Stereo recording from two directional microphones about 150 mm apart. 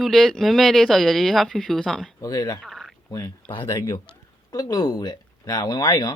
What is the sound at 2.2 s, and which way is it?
Speech, 25° left (ahead or behind).